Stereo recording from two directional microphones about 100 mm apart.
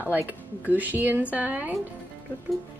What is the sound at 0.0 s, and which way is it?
Speech, 20° right (ahead or behind).